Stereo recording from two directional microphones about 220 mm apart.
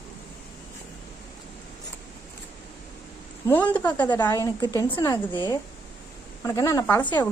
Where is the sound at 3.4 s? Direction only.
10° left (ahead or behind).